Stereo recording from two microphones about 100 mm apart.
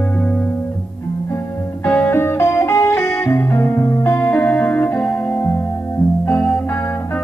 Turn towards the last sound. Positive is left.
turn(degrees=10)  # may be behind; listen again after turning